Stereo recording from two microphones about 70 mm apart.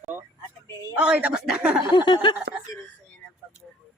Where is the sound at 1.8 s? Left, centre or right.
Left.